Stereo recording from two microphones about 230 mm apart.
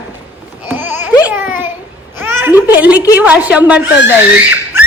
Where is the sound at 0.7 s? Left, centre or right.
Centre.